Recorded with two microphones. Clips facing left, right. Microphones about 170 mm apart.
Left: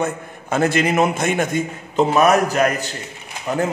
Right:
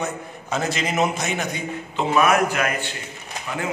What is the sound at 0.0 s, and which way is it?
A man's voice, 55° left (ahead or behind).